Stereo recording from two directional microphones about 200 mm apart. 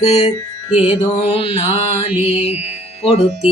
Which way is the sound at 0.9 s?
30° left (ahead or behind).